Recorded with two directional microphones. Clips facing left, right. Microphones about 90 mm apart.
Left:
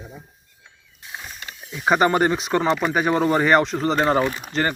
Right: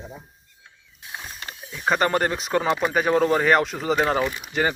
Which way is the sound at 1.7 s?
10° left (ahead or behind).